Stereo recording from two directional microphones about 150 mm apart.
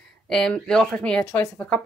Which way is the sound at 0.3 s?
5° left (ahead or behind).